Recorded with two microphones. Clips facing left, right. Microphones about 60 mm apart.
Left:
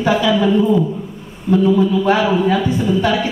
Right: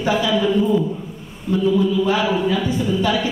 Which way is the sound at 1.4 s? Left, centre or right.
Left.